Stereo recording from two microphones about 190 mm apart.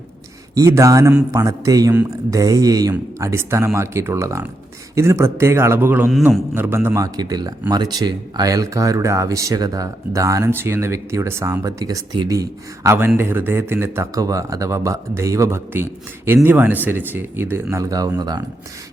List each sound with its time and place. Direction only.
0.5 s speech: 15° right (ahead or behind)
6.1 s a man's voice: centre (ahead or behind)
6.5 s speech: 10° right (ahead or behind)